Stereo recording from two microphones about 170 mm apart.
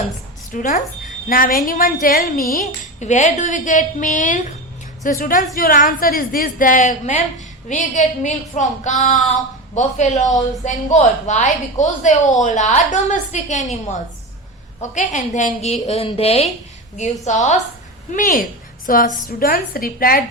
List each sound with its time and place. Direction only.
0.5 s a woman's voice: 50° left (ahead or behind)
2.6 s a woman's voice: 45° left (ahead or behind)